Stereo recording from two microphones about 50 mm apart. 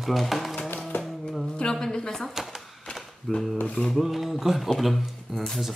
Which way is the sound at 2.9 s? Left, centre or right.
Left.